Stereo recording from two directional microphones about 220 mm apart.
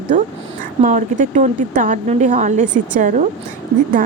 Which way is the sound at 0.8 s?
35° right (ahead or behind).